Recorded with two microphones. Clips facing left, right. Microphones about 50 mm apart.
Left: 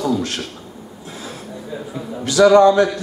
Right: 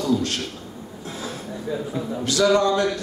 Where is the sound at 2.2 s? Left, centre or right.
Left.